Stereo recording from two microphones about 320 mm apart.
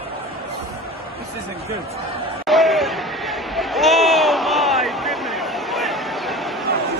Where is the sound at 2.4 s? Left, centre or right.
Centre.